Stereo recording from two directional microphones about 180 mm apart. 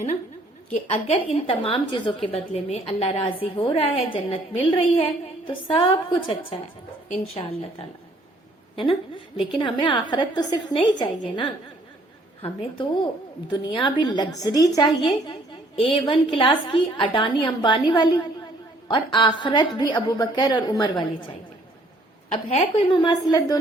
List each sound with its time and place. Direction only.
0.9 s a woman's voice: 30° left (ahead or behind)
22.3 s a woman's voice: 35° left (ahead or behind)